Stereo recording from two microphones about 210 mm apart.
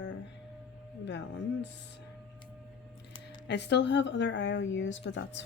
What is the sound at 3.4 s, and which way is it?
Speech, 55° left (ahead or behind).